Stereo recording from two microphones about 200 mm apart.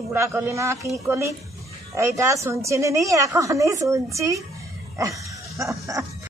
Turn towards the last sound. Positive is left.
turn(degrees=-15)  # may be behind; listen again after turning